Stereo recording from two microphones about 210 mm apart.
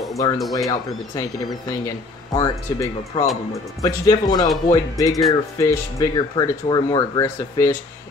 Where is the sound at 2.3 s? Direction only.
15° left (ahead or behind).